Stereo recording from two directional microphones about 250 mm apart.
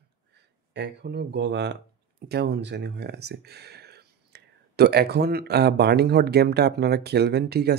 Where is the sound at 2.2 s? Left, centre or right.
Right.